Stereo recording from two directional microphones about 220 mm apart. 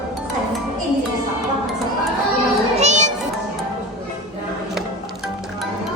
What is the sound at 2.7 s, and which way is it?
Music, 30° right (ahead or behind).